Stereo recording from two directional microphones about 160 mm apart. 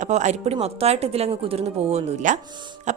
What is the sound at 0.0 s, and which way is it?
A woman's voice, 45° right (ahead or behind).